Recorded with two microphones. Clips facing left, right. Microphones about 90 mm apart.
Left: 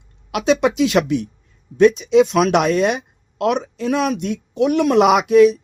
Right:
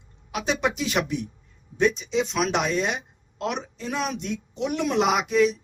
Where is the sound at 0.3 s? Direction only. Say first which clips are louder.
Left 9 dB; 85° left.